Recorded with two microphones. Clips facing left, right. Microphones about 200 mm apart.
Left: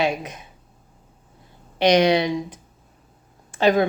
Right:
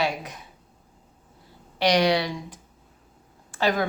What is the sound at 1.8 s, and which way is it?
Speech, 20° left (ahead or behind).